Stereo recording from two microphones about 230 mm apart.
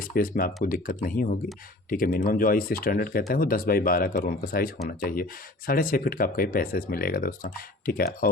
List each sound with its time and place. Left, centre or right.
0.0 s speech: left